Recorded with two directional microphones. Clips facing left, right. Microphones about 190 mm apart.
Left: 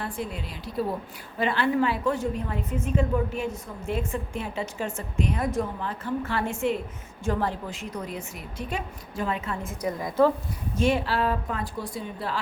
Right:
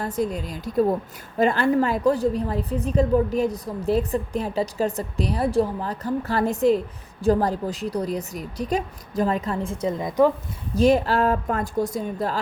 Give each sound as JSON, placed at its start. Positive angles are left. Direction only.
{"t": 0.0, "sound": "a woman's voice", "side_deg": -40}
{"t": 9.8, "sound": "a woman's voice", "side_deg": -20}
{"t": 10.8, "sound": "speech", "side_deg": -40}